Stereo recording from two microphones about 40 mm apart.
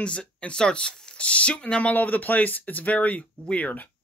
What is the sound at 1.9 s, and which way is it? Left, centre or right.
Speech, left.